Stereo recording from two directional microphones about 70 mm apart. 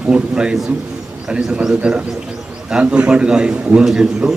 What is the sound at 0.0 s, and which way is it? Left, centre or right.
A man's voice, centre.